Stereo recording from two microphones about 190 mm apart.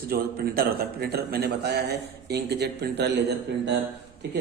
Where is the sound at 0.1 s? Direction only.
55° right (ahead or behind).